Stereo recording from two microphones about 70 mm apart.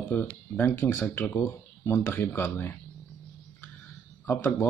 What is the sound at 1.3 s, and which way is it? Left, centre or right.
Speech, left.